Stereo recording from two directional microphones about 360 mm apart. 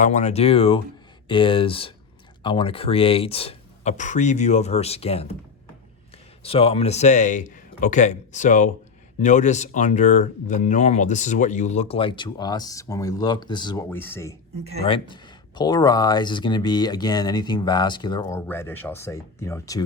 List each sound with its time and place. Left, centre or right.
0.0 s speech: centre
6.4 s speech: centre